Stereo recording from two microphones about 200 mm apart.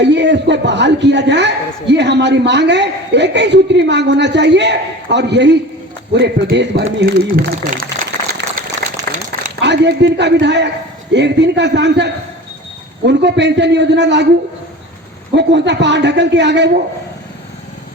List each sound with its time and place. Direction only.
0.0 s a man's voice: 60° right (ahead or behind)
7.0 s a man's voice: 45° right (ahead or behind)
8.4 s a sound: 55° right (ahead or behind)
8.8 s applause: 55° right (ahead or behind)
9.6 s a man's voice: 60° right (ahead or behind)
15.4 s a man's voice: 60° right (ahead or behind)